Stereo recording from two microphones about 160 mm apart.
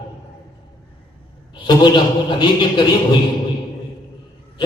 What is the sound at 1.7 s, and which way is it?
A man's voice, 30° left (ahead or behind).